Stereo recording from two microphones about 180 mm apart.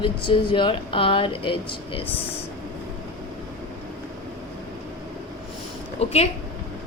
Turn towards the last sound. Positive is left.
turn(degrees=35)  # may be behind; listen again after turning